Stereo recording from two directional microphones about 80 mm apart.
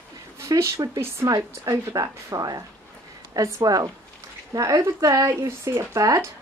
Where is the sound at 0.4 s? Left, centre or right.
Right.